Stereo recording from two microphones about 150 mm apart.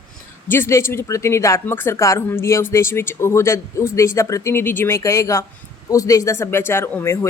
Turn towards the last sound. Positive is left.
turn(degrees=20)  # may be behind; listen again after turning